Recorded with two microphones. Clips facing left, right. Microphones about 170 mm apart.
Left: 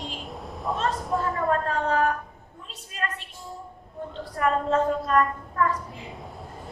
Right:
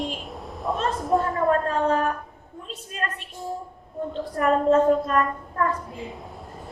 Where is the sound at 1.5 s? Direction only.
45° right (ahead or behind).